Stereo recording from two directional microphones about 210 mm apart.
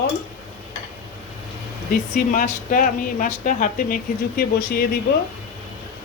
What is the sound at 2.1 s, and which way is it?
Speech, 40° left (ahead or behind).